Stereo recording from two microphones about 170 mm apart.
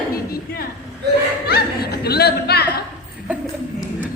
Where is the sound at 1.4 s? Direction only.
65° left (ahead or behind).